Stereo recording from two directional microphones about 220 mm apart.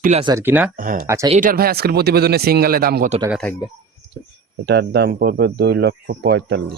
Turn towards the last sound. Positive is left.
turn(degrees=-50)  # may be behind; listen again after turning